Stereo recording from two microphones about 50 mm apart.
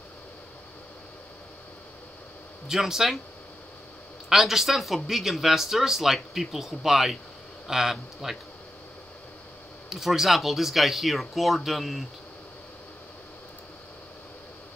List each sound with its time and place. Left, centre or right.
2.7 s a man's voice: centre
4.3 s a man's voice: centre
9.8 s speech: centre